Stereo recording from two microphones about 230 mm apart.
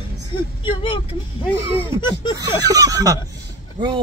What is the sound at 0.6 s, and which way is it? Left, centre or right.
Vehicle, left.